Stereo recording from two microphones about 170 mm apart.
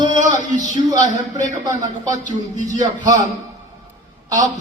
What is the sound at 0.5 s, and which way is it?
Speech, 45° left (ahead or behind).